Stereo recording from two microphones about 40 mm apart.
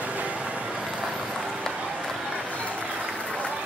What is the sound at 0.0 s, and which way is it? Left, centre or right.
Vehicle, right.